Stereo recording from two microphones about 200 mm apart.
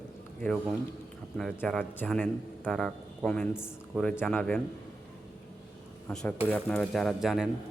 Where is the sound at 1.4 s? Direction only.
Centre (ahead or behind).